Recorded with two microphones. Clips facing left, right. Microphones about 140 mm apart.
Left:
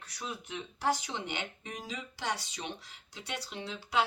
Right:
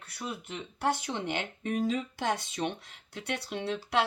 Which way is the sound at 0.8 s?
55° right (ahead or behind).